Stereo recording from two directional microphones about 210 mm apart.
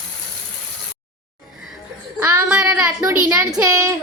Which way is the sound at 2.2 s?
10° right (ahead or behind).